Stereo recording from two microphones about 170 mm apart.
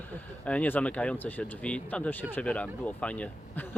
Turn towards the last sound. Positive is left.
turn(degrees=10)  # may be behind; listen again after turning